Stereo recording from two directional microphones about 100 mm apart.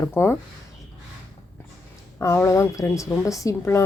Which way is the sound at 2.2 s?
30° left (ahead or behind).